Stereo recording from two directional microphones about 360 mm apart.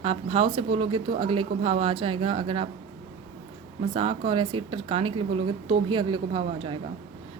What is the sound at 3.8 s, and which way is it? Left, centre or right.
Speech, centre.